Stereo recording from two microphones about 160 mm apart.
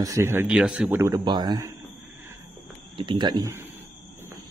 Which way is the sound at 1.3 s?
25° right (ahead or behind).